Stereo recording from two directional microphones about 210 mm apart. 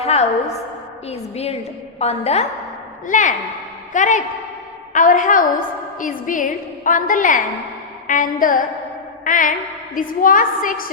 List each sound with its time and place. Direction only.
0.0 s a woman's voice: 30° left (ahead or behind)